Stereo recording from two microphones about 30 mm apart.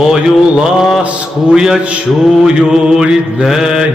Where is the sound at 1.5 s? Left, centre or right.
Centre.